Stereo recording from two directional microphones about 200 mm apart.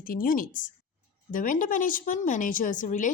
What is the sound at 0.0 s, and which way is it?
Speech, 45° left (ahead or behind).